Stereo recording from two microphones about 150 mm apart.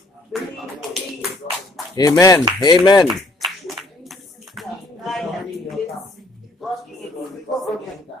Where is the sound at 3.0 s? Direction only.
Centre (ahead or behind).